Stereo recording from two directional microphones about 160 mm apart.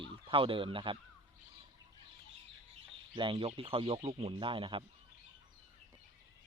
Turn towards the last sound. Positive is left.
turn(degrees=-35)  # may be behind; listen again after turning